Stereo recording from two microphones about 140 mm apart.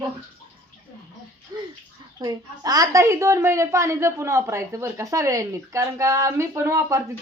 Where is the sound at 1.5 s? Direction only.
25° right (ahead or behind).